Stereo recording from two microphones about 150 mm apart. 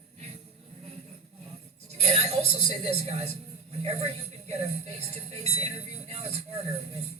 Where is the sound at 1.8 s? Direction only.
45° right (ahead or behind).